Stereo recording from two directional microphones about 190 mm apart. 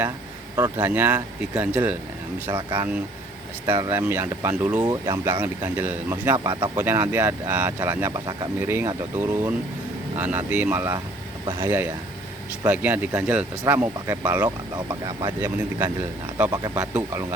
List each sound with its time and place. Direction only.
0.5 s speech: 10° right (ahead or behind)
2.5 s speech: 20° right (ahead or behind)
2.7 s speech: 10° right (ahead or behind)
4.8 s speech: 20° right (ahead or behind)
6.7 s speech: 10° right (ahead or behind)